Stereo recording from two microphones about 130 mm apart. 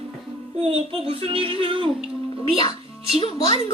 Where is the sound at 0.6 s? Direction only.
50° right (ahead or behind).